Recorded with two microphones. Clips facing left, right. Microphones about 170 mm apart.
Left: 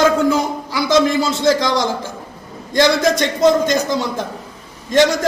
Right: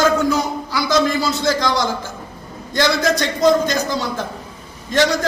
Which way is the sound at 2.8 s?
25° left (ahead or behind).